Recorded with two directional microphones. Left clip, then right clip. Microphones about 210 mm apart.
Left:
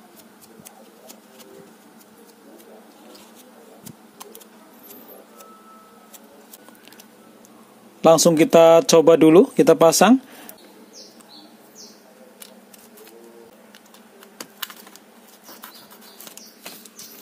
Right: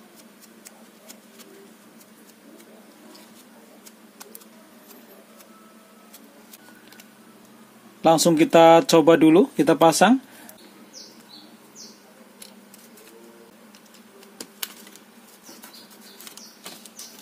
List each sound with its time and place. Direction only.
8.0 s speech: 30° left (ahead or behind)